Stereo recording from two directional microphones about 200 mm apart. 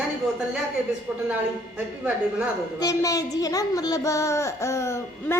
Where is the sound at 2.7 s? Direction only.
15° left (ahead or behind).